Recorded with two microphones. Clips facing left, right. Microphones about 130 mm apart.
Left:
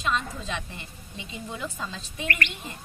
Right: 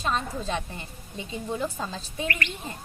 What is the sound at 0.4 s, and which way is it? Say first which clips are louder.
A woman's voice: right 4 dB; 40° right (ahead or behind).